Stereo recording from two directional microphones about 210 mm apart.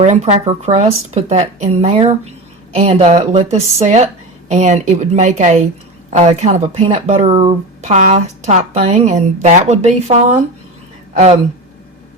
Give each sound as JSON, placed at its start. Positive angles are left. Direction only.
{"t": 0.0, "sound": "speech", "side_deg": -30}